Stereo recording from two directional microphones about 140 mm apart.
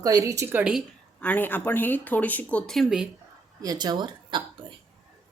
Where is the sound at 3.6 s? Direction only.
30° right (ahead or behind).